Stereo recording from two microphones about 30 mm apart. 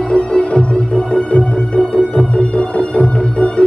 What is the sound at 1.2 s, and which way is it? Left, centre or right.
Music, left.